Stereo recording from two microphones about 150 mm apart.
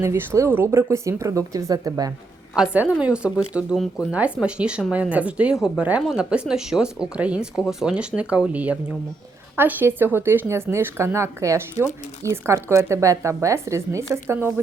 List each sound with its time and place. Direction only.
0.0 s speech: 15° right (ahead or behind)
2.6 s speech: 5° right (ahead or behind)